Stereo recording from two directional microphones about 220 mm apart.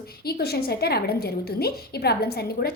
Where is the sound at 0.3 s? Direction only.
45° left (ahead or behind).